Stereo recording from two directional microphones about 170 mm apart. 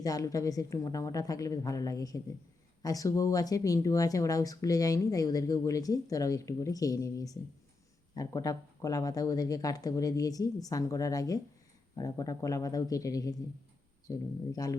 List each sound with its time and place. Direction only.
0.0 s speech: 20° left (ahead or behind)